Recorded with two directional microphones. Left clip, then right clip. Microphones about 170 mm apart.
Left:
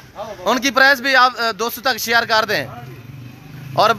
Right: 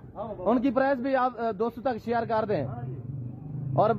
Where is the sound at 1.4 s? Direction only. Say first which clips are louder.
Left 9 dB; 45° left (ahead or behind).